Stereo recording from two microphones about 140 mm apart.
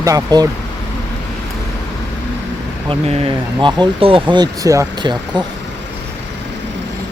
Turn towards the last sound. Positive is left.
turn(degrees=-30)  # may be behind; listen again after turning